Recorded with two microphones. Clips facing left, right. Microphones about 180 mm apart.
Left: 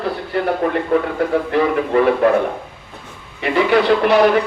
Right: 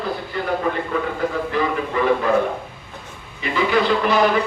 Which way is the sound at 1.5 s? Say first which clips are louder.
Left 6 dB; 65° left (ahead or behind).